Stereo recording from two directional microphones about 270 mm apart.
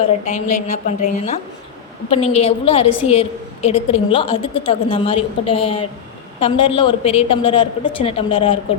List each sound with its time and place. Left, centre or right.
0.0 s a woman's voice: left